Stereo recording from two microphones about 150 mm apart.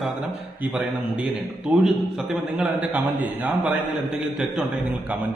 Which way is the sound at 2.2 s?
10° right (ahead or behind).